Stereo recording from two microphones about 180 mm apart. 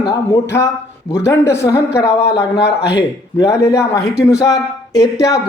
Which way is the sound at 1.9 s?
5° right (ahead or behind).